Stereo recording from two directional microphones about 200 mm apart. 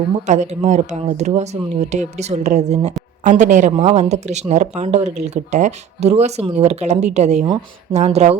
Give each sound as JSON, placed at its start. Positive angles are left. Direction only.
{"t": 0.3, "sound": "speech", "side_deg": -35}